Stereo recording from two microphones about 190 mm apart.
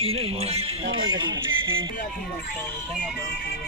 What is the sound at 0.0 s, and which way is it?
Music, 30° right (ahead or behind).